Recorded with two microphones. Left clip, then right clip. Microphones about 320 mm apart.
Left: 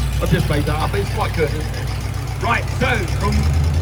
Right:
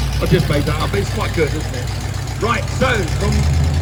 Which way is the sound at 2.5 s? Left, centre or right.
Centre.